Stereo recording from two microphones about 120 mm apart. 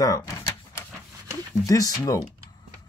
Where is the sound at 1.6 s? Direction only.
30° left (ahead or behind).